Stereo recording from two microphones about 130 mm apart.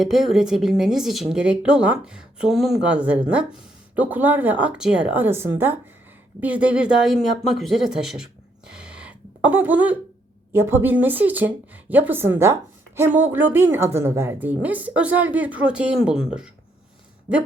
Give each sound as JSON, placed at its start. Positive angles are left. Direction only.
{"t": 0.0, "sound": "a woman's voice", "side_deg": 0}